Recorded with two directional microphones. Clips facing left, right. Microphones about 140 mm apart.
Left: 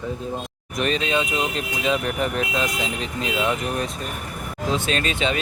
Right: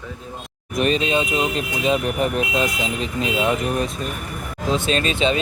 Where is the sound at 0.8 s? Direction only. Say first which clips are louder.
Right 4 dB; 35° left (ahead or behind).